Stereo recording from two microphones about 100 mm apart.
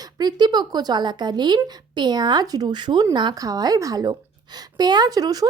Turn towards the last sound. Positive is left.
turn(degrees=-40)  # may be behind; listen again after turning